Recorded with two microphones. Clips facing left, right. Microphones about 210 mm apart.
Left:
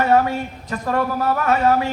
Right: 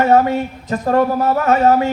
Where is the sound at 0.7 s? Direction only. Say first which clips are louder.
Right 6 dB; 40° right (ahead or behind).